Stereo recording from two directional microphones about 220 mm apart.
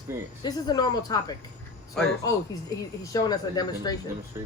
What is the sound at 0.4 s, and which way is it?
Speech, 15° left (ahead or behind).